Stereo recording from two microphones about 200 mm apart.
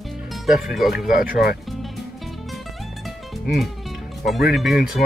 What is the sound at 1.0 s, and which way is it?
Speech, 45° left (ahead or behind).